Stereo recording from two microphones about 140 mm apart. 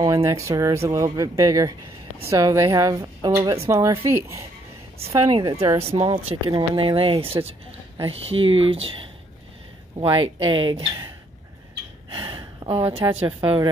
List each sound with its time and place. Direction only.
0.0 s speech: 25° right (ahead or behind)
5.3 s speech: 30° right (ahead or behind)
5.8 s speech: 45° right (ahead or behind)
10.1 s speech: 35° right (ahead or behind)